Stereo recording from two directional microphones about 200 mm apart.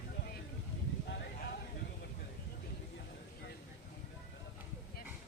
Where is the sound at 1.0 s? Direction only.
55° left (ahead or behind).